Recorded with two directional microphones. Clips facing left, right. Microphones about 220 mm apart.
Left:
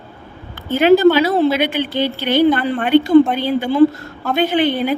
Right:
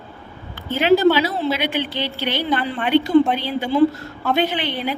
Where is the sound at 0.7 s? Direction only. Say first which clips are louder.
Left 4 dB; 50° left (ahead or behind).